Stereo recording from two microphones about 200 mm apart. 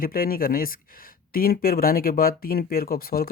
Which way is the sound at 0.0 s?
45° left (ahead or behind).